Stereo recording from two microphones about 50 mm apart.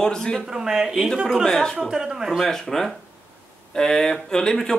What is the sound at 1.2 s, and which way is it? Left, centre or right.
Speech, centre.